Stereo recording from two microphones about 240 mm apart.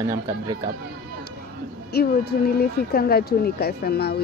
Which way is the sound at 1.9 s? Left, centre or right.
Left.